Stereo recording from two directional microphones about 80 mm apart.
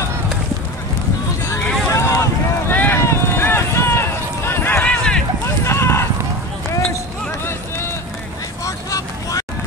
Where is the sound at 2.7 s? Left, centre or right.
Left.